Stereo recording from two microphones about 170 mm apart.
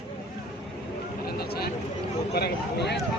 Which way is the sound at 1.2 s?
65° left (ahead or behind).